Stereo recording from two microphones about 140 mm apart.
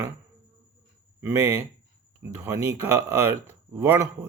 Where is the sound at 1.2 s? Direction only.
20° right (ahead or behind).